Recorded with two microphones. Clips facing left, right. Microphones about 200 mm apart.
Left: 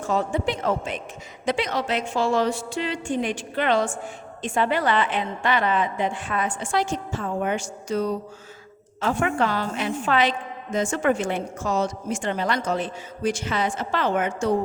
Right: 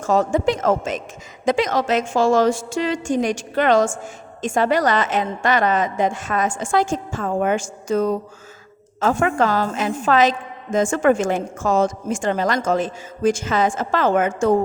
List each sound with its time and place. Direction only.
0.0 s a woman's voice: 45° right (ahead or behind)